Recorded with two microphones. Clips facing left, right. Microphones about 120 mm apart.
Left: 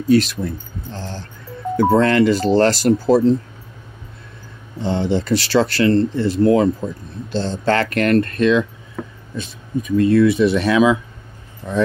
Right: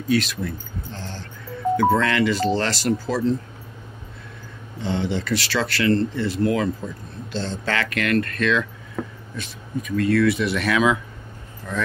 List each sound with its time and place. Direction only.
0.1 s speech: 40° left (ahead or behind)
0.9 s music: 35° left (ahead or behind)
1.8 s speech: 35° left (ahead or behind)
4.8 s speech: 35° left (ahead or behind)
8.4 s speech: 20° left (ahead or behind)